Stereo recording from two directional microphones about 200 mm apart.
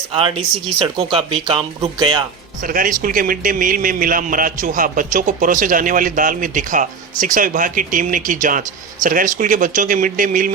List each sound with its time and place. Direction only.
0.2 s speech: 25° right (ahead or behind)
2.6 s a man's voice: 45° right (ahead or behind)